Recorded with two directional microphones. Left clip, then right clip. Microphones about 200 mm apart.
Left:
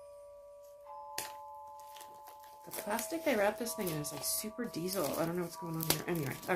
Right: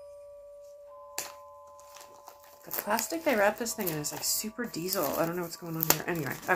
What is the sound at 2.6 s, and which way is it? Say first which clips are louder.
Speech: right 7 dB; 5° right (ahead or behind).